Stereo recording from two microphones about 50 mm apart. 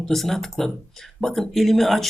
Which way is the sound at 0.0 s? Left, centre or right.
Centre.